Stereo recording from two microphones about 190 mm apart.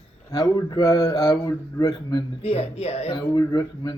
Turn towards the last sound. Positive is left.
turn(degrees=20)  # may be behind; listen again after turning